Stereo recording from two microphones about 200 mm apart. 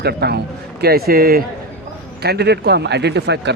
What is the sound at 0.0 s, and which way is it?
A man's voice, 55° right (ahead or behind).